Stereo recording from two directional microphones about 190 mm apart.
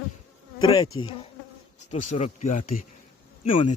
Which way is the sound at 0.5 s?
20° left (ahead or behind).